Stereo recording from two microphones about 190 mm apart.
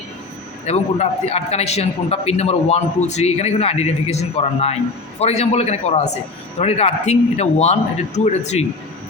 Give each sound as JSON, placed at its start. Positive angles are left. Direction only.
{"t": 0.6, "sound": "a man's voice", "side_deg": 35}